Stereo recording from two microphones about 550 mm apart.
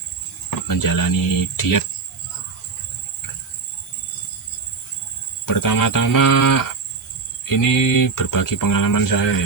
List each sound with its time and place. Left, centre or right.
0.7 s speech: left
5.5 s speech: left